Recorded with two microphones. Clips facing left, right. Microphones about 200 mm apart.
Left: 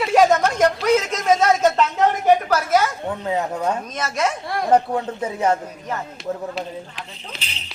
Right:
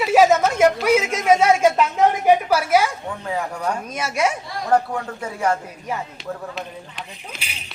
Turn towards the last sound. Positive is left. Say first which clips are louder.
# even
turn(degrees=-10)  # may be behind; listen again after turning